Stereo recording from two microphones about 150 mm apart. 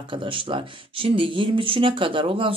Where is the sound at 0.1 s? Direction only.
35° right (ahead or behind).